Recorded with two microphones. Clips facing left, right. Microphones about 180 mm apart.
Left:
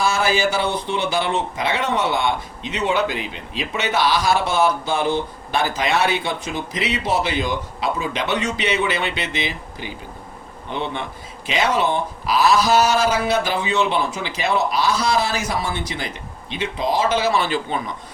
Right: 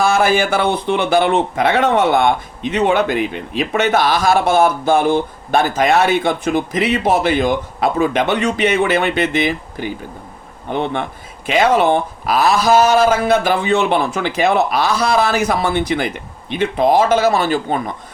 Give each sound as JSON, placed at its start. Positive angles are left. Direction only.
{"t": 0.0, "sound": "speech", "side_deg": -55}